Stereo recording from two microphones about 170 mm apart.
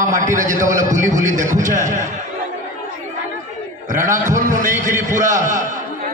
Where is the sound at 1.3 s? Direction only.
45° right (ahead or behind).